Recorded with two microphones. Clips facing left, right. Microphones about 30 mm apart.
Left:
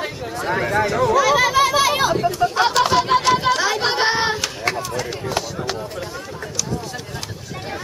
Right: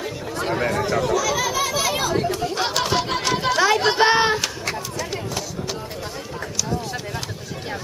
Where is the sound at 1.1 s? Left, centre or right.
Left.